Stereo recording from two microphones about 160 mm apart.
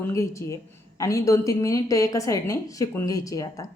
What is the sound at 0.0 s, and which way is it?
A woman's voice, 20° left (ahead or behind).